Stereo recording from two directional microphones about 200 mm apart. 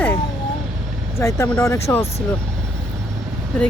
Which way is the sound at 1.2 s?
15° left (ahead or behind).